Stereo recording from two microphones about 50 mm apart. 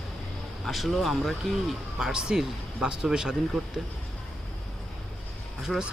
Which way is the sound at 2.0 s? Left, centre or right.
Centre.